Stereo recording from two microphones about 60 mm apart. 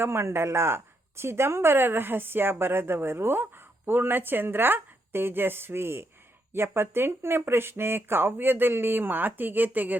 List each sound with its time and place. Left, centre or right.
0.0 s a woman's voice: right